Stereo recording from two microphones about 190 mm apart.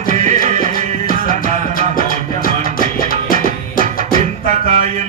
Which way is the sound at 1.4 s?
50° left (ahead or behind).